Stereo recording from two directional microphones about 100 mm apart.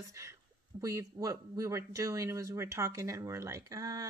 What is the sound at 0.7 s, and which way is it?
Speech, 30° right (ahead or behind).